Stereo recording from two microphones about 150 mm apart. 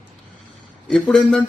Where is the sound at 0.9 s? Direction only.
Centre (ahead or behind).